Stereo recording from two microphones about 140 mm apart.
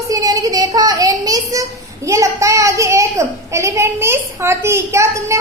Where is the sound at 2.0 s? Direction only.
20° right (ahead or behind).